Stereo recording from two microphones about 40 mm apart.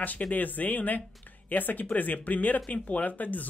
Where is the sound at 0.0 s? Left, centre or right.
Left.